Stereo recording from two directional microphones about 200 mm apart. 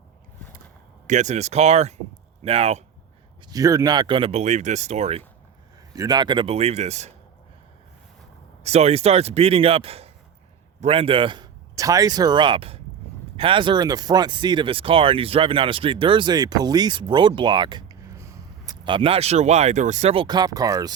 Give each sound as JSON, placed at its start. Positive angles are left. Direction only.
{"t": 1.0, "sound": "speech", "side_deg": -35}
{"t": 3.5, "sound": "speech", "side_deg": -15}
{"t": 5.9, "sound": "speech", "side_deg": -20}
{"t": 8.6, "sound": "a man's voice", "side_deg": -35}